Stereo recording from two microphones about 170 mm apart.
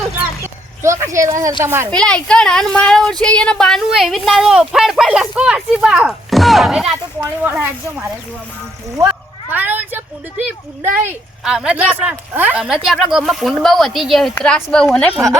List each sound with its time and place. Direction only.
0.4 s speech: 15° right (ahead or behind)
1.9 s speech: 5° left (ahead or behind); by 7.7 s 10° right (ahead or behind)
9.5 s speech: 10° right (ahead or behind); by 15.1 s 5° left (ahead or behind)